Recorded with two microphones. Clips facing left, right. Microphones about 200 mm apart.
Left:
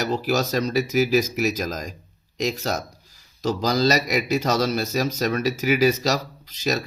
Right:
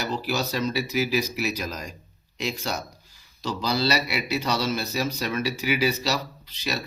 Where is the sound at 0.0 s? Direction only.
45° left (ahead or behind).